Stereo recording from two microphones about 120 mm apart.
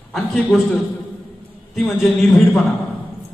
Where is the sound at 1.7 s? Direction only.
Centre (ahead or behind).